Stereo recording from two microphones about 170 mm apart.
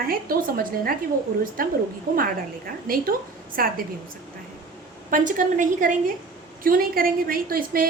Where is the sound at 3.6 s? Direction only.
60° right (ahead or behind).